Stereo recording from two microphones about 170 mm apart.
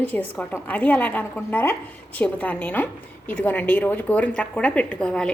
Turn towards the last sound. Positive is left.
turn(degrees=5)  # may be behind; listen again after turning